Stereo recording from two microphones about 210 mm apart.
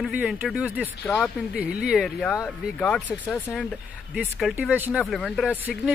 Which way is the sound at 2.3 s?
10° left (ahead or behind).